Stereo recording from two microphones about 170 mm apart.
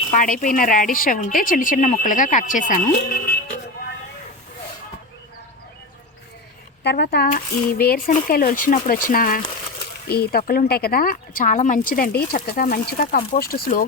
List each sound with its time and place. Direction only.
0.1 s a woman's voice: 50° left (ahead or behind)
3.0 s speech: 65° left (ahead or behind)
6.8 s speech: 70° left (ahead or behind)
7.3 s speech: 55° left (ahead or behind)